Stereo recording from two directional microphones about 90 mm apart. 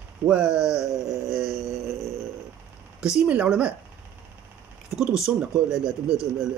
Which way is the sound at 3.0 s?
10° right (ahead or behind).